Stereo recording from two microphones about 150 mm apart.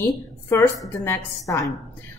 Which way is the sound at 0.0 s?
15° left (ahead or behind).